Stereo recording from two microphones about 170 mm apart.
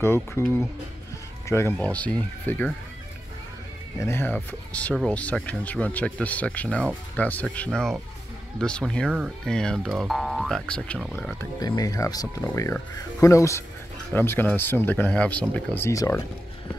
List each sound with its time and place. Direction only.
0.0 s speech: 15° left (ahead or behind)
1.8 s speech: 10° left (ahead or behind)
4.0 s speech: 15° left (ahead or behind); by 11.2 s 5° right (ahead or behind)
11.2 s speech: 15° left (ahead or behind)